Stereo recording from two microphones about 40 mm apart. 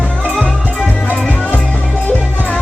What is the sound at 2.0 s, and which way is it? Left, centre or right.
Music, left.